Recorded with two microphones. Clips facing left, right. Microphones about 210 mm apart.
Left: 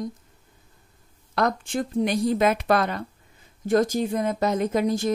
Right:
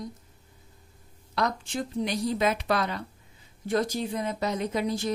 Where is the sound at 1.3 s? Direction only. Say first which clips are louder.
Left 5 dB; 55° left (ahead or behind).